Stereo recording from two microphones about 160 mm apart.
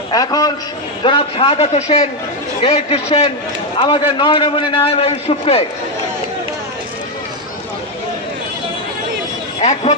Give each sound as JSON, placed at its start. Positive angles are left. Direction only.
{"t": 0.1, "sound": "a man's voice", "side_deg": 25}
{"t": 1.0, "sound": "a man's voice", "side_deg": 35}
{"t": 9.6, "sound": "speech", "side_deg": 40}